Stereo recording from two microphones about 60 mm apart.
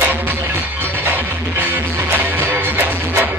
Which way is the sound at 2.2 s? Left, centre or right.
Right.